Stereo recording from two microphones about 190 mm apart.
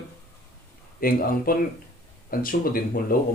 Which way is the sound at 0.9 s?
50° left (ahead or behind).